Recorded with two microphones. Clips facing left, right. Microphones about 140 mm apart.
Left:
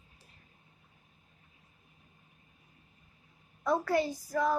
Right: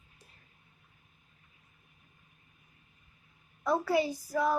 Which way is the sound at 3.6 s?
5° right (ahead or behind).